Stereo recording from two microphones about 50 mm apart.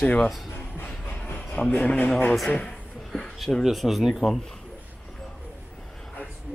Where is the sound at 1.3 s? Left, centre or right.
Left.